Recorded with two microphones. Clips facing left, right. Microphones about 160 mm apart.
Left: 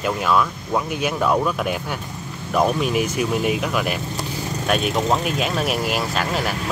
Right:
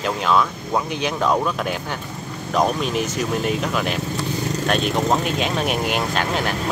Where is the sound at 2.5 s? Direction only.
10° left (ahead or behind).